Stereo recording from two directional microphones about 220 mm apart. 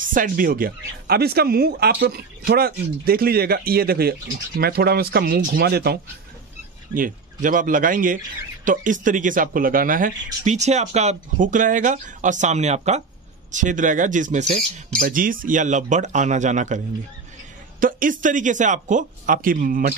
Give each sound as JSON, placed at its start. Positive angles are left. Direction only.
{"t": 0.0, "sound": "speech", "side_deg": -40}